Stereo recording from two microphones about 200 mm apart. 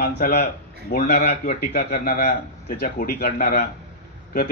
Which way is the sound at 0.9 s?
40° left (ahead or behind).